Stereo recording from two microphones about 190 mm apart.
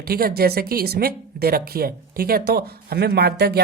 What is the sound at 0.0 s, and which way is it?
Speech, 55° right (ahead or behind).